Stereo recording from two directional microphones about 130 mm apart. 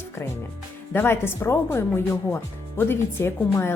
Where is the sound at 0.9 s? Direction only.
15° left (ahead or behind).